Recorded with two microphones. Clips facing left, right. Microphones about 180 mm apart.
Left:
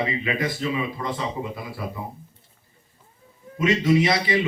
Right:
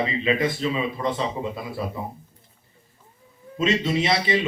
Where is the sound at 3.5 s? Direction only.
25° right (ahead or behind).